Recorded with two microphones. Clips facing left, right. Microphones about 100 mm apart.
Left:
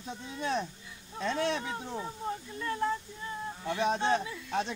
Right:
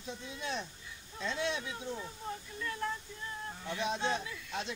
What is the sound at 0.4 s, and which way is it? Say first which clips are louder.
Speech: left 9 dB; 50° left (ahead or behind).